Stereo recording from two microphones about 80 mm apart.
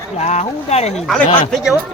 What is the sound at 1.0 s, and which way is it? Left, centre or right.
Speech, centre.